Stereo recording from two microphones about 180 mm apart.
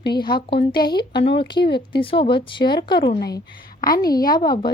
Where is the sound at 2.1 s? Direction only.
30° left (ahead or behind).